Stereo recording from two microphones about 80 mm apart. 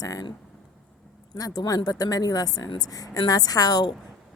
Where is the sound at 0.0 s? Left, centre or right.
Left.